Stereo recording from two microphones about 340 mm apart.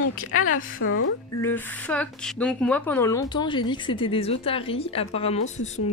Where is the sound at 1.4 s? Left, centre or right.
Centre.